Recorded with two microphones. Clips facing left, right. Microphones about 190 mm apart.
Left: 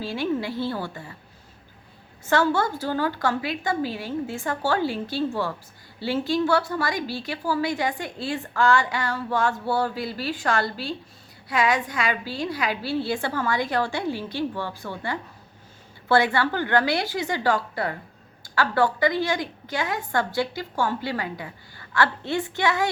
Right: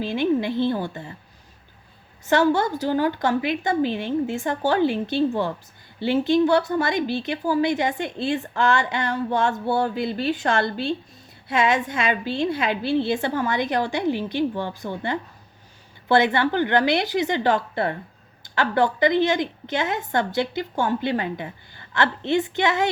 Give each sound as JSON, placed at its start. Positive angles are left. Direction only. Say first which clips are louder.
{"t": 0.0, "sound": "a woman's voice", "louder": "right 4 dB", "side_deg": -20}
{"t": 2.2, "sound": "a woman's voice", "louder": "right 3 dB", "side_deg": -20}